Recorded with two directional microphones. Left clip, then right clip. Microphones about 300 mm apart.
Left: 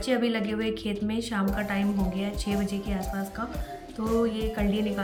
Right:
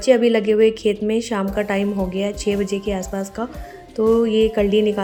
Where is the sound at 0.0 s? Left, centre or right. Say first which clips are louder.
Right 12 dB; centre.